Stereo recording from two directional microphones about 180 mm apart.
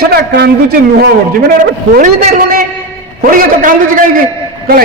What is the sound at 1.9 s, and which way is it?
A man's voice, 50° right (ahead or behind).